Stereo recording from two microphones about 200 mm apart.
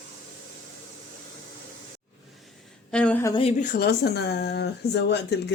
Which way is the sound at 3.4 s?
35° left (ahead or behind).